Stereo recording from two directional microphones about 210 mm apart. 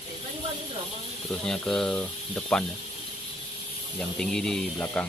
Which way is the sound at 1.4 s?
Centre (ahead or behind).